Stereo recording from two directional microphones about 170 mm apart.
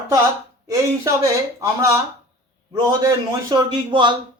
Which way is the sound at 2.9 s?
20° right (ahead or behind).